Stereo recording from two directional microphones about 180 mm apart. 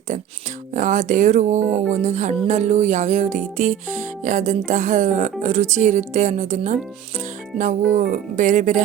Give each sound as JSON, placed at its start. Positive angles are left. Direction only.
{"t": 0.7, "sound": "music", "side_deg": -45}